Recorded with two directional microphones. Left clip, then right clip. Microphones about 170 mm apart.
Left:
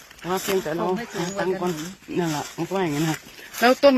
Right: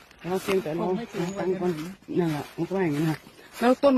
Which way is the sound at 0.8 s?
15° left (ahead or behind).